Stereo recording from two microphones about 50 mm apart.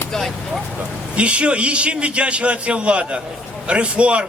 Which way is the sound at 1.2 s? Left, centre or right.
Right.